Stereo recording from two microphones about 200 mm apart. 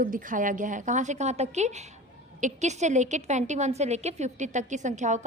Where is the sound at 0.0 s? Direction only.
40° right (ahead or behind).